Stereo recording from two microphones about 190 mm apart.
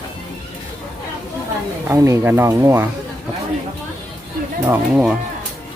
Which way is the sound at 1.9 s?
15° right (ahead or behind).